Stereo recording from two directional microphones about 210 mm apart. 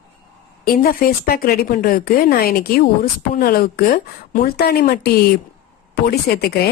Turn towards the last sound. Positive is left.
turn(degrees=50)  # may be behind; listen again after turning